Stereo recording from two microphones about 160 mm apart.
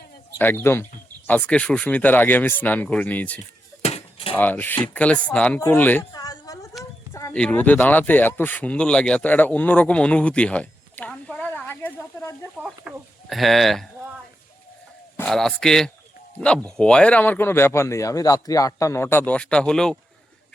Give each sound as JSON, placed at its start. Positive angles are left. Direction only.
{"t": 0.3, "sound": "speech", "side_deg": 15}
{"t": 3.8, "sound": "a sound", "side_deg": 35}
{"t": 4.4, "sound": "speech", "side_deg": 10}
{"t": 6.1, "sound": "a sound", "side_deg": 25}
{"t": 7.3, "sound": "speech", "side_deg": 10}
{"t": 12.5, "sound": "speech", "side_deg": -10}
{"t": 15.3, "sound": "speech", "side_deg": 5}